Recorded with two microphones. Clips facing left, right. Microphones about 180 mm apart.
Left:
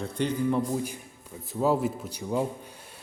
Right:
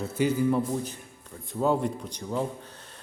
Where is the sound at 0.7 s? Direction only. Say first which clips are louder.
Left 1 dB; 10° left (ahead or behind).